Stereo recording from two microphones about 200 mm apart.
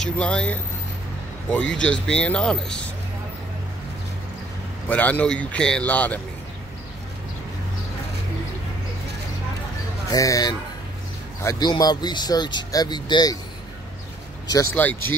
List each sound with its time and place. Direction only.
0.0 s speech: 5° left (ahead or behind)
1.8 s speech: 5° left (ahead or behind)
4.8 s a man's voice: 10° left (ahead or behind)
10.0 s speech: 15° left (ahead or behind)
14.5 s a man's voice: 10° left (ahead or behind)